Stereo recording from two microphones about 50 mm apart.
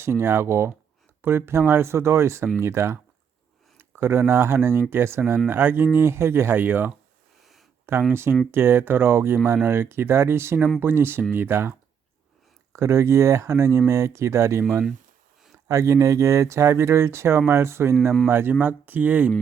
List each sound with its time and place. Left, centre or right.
0.0 s speech: right
1.2 s speech: right
3.8 s speech: right
6.6 s speech: right
7.9 s speech: right
12.7 s speech: right
15.6 s speech: right
18.3 s speech: right
18.6 s speech: right